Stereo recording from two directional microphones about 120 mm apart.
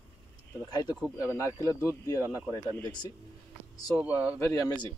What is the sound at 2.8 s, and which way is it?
Speech, 35° left (ahead or behind).